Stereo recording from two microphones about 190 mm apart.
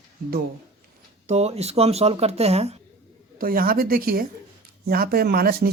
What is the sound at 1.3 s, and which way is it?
Speech, 35° right (ahead or behind).